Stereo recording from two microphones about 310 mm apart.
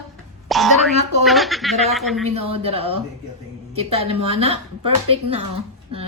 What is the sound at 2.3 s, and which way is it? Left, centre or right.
Speech, centre.